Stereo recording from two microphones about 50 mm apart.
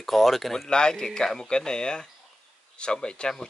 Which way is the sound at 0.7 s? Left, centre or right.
Centre.